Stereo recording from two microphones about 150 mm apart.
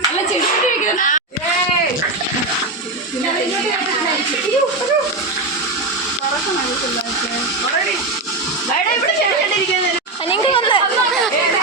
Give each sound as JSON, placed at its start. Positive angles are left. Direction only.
{"t": 0.9, "sound": "speech", "side_deg": 60}
{"t": 10.2, "sound": "chatter", "side_deg": 35}